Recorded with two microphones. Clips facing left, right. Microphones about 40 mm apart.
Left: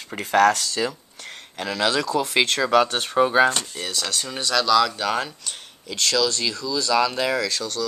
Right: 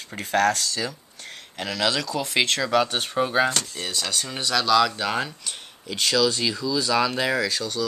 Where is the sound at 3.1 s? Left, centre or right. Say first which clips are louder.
Left 5 dB; centre.